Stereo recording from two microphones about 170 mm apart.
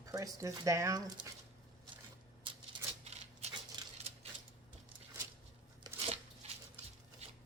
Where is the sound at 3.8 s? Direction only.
25° right (ahead or behind).